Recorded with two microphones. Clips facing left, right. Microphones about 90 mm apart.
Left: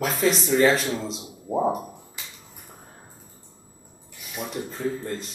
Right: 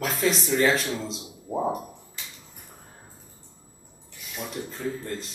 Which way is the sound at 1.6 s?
15° left (ahead or behind).